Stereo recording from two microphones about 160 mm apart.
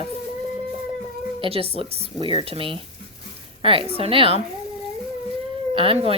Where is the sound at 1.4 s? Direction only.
35° right (ahead or behind).